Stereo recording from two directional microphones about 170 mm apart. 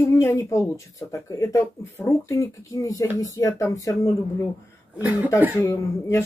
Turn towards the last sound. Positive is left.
turn(degrees=15)  # may be behind; listen again after turning